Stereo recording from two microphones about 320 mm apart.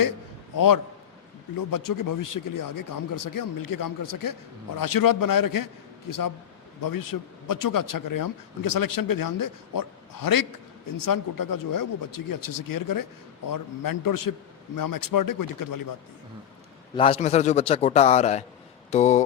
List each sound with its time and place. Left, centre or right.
0.5 s a man's voice: left
16.9 s a man's voice: centre